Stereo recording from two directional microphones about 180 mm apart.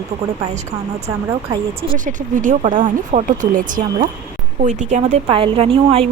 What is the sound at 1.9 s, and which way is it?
Speech, 45° right (ahead or behind).